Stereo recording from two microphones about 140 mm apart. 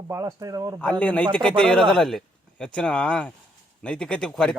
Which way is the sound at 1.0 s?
10° left (ahead or behind).